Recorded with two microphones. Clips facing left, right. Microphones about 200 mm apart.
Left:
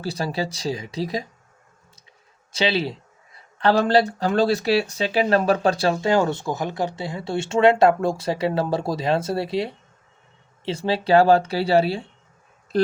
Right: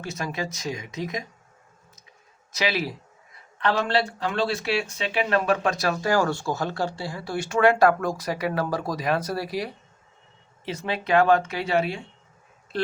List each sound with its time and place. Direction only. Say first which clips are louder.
0.0 s speech: left 5 dB; 30° left (ahead or behind)
2.5 s speech: left 4 dB; 30° left (ahead or behind)